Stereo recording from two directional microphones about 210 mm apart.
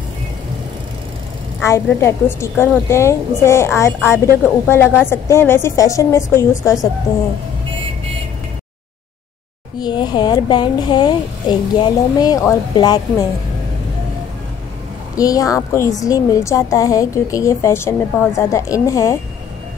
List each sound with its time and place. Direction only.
1.6 s a woman's voice: 15° left (ahead or behind)
9.8 s speech: 20° left (ahead or behind)
15.1 s a woman's voice: 15° left (ahead or behind)